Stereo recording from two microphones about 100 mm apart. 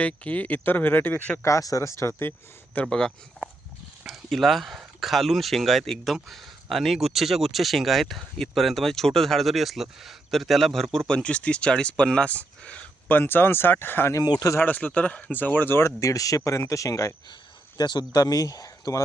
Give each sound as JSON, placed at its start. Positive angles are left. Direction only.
{"t": 0.0, "sound": "speech", "side_deg": 15}
{"t": 1.5, "sound": "speech", "side_deg": 35}
{"t": 2.7, "sound": "speech", "side_deg": 10}
{"t": 14.3, "sound": "speech", "side_deg": 35}
{"t": 14.6, "sound": "speech", "side_deg": 15}
{"t": 17.7, "sound": "speech", "side_deg": 45}